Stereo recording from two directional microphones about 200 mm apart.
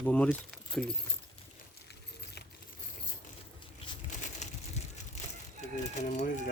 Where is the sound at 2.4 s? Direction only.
55° left (ahead or behind).